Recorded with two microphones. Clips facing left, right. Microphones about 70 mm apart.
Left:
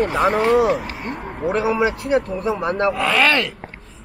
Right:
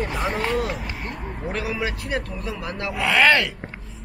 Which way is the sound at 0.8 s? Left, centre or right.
Left.